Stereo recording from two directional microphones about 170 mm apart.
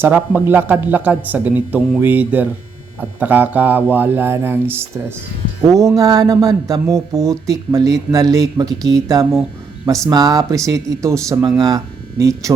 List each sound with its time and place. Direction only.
0.0 s speech: 10° right (ahead or behind)